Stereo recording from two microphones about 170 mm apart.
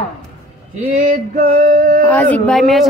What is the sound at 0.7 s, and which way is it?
Male singing, 50° right (ahead or behind).